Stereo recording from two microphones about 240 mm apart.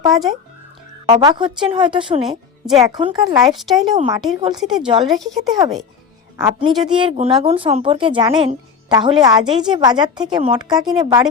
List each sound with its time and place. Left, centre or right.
0.1 s speech: centre
1.0 s a woman's voice: centre
2.6 s speech: centre
2.9 s a woman's voice: centre
3.5 s speech: centre
4.4 s a woman's voice: centre
4.6 s speech: centre
6.4 s a child's voice: centre